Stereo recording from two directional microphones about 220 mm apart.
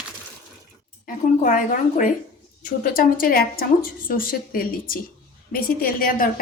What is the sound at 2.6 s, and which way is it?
A woman's voice, 40° left (ahead or behind).